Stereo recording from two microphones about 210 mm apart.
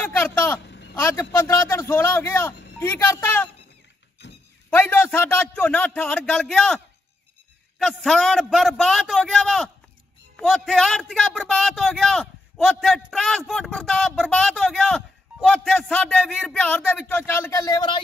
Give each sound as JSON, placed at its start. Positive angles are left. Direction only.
{"t": 0.0, "sound": "speech", "side_deg": 10}
{"t": 0.6, "sound": "a sound", "side_deg": 55}
{"t": 1.1, "sound": "speech", "side_deg": 15}
{"t": 4.2, "sound": "a sound", "side_deg": 55}
{"t": 4.6, "sound": "a man's voice", "side_deg": 5}
{"t": 7.8, "sound": "a man's voice", "side_deg": 0}